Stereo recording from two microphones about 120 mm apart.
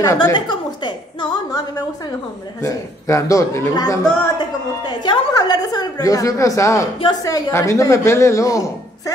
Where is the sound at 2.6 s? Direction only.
25° left (ahead or behind).